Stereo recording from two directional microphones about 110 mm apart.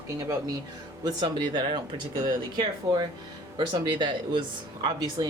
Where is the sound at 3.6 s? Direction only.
45° right (ahead or behind).